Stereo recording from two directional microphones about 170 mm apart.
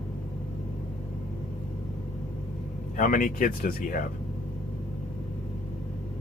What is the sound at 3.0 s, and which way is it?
Speech, 50° left (ahead or behind).